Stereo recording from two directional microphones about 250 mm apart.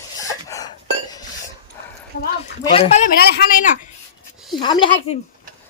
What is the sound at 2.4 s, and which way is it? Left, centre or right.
A man's voice, left.